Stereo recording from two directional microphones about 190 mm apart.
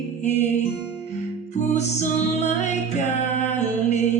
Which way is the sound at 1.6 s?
35° left (ahead or behind).